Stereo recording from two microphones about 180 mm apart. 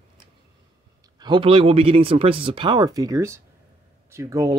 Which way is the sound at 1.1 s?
25° right (ahead or behind).